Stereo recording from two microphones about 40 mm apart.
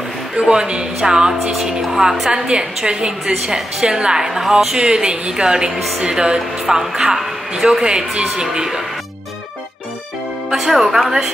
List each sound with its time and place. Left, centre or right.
0.4 s a woman's voice: right
1.4 s a woman's voice: centre
4.7 s a woman's voice: right
5.7 s a woman's voice: centre
5.9 s a woman's voice: centre
10.5 s speech: centre